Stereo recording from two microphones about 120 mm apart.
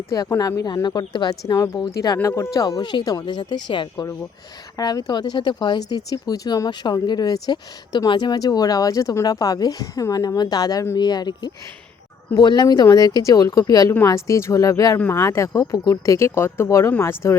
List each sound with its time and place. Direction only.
0.1 s speech: 30° left (ahead or behind)